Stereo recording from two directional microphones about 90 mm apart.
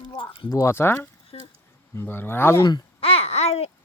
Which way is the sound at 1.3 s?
90° left.